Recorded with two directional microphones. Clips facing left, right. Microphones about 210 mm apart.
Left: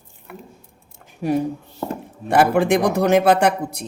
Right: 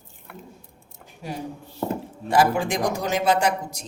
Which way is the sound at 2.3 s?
60° left (ahead or behind).